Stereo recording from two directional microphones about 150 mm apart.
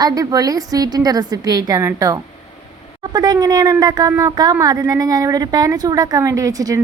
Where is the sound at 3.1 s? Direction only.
25° right (ahead or behind).